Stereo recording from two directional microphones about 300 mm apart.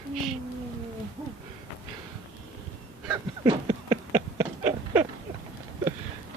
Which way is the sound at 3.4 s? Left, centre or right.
Centre.